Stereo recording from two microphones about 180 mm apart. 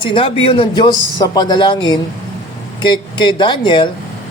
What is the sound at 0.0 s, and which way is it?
Speech, 30° left (ahead or behind).